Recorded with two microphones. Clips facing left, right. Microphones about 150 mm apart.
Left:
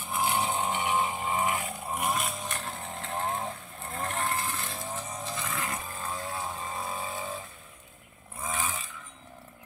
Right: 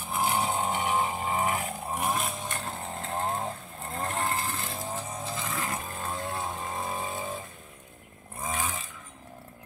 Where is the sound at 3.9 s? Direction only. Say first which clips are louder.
Right 1 dB; 25° right (ahead or behind).